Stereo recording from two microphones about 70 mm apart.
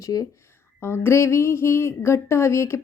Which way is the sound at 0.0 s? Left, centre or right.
Left.